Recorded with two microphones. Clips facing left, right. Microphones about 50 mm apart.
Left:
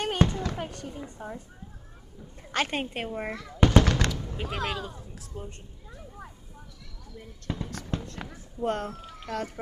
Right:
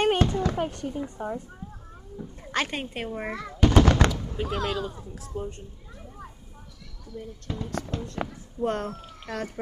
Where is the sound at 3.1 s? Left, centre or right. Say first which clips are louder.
Right 1 dB; centre.